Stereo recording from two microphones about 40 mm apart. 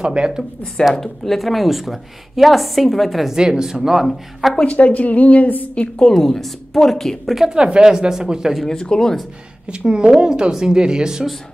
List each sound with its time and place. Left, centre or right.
0.0 s speech: centre
0.9 s a woman's voice: centre
3.3 s speech: centre
4.4 s a woman's voice: centre
4.7 s a woman's voice: left
6.1 s a woman's voice: centre
7.3 s speech: centre
8.6 s speech: centre
9.7 s speech: right